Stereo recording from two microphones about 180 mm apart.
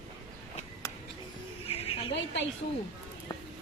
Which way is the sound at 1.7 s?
30° left (ahead or behind).